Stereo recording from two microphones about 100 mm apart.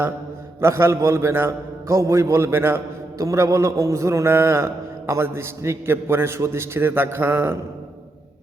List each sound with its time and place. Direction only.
0.6 s a man's voice: 25° right (ahead or behind)